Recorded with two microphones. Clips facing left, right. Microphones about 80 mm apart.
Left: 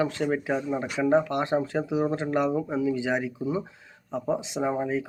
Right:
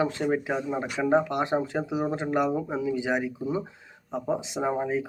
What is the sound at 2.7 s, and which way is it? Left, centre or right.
Speech, right.